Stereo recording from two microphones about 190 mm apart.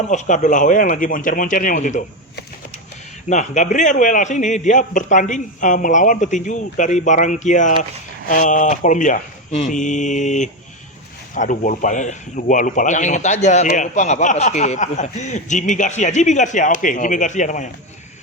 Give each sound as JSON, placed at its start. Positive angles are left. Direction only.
{"t": 0.1, "sound": "speech", "side_deg": 40}
{"t": 3.2, "sound": "a man's voice", "side_deg": 40}